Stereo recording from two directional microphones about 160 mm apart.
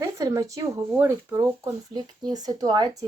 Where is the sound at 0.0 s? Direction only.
20° right (ahead or behind).